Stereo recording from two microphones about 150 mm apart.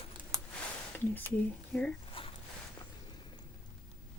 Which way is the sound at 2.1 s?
40° left (ahead or behind).